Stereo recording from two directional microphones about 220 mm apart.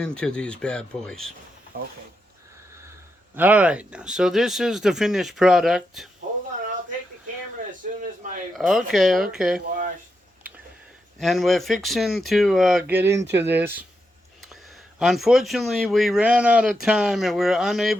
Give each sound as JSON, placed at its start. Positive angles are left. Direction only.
{"t": 0.0, "sound": "speech", "side_deg": 5}
{"t": 1.7, "sound": "speech", "side_deg": -40}
{"t": 3.3, "sound": "speech", "side_deg": -5}
{"t": 7.7, "sound": "a sound", "side_deg": -35}
{"t": 8.5, "sound": "speech", "side_deg": 0}
{"t": 11.2, "sound": "speech", "side_deg": 0}